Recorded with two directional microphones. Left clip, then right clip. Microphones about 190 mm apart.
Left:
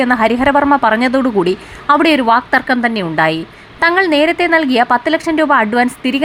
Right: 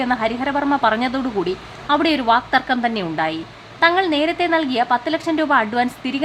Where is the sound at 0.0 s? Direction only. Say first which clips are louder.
Left 8 dB; 25° left (ahead or behind).